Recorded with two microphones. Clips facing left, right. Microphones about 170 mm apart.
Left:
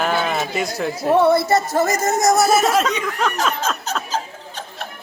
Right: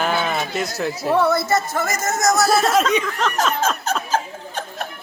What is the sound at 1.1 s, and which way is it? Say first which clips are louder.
Speech: left 3 dB; 25° left (ahead or behind).